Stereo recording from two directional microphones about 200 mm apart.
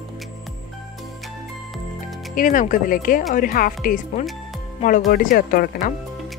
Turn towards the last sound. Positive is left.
turn(degrees=45)  # may be behind; listen again after turning